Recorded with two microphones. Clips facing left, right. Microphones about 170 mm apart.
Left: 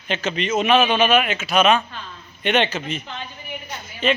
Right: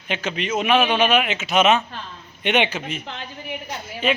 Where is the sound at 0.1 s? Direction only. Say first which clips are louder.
Left 2 dB; 10° right (ahead or behind).